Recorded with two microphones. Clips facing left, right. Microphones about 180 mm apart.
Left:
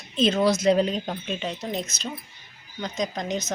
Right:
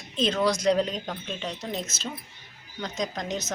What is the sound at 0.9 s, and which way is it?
Speech, 25° left (ahead or behind).